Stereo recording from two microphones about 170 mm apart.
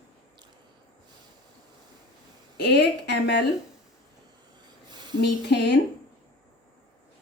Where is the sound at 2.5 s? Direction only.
80° left.